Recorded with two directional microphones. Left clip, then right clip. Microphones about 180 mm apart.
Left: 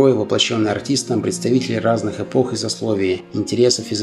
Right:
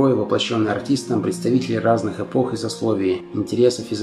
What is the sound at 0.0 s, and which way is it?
Speech, 25° left (ahead or behind).